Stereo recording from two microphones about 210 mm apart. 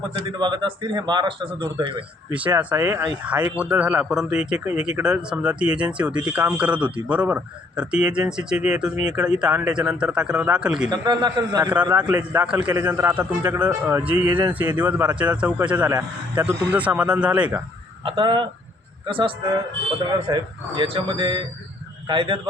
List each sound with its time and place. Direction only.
0.3 s speech: 20° right (ahead or behind)
2.3 s a man's voice: 5° right (ahead or behind)
10.8 s speech: 20° right (ahead or behind)
11.9 s a man's voice: 10° right (ahead or behind)
18.0 s speech: 25° right (ahead or behind)